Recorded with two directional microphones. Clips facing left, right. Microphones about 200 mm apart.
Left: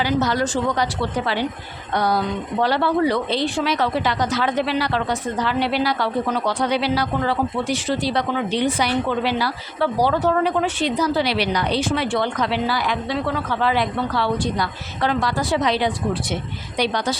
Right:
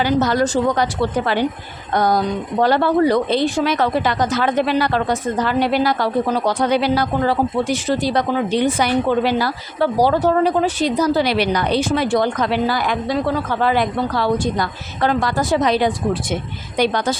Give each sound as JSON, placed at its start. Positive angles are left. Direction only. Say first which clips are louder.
{"t": 0.0, "sound": "speech", "louder": "right 4 dB", "side_deg": -50}
{"t": 2.0, "sound": "speech", "louder": "right 3 dB", "side_deg": -45}